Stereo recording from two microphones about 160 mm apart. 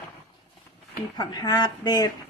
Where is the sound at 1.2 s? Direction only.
25° left (ahead or behind).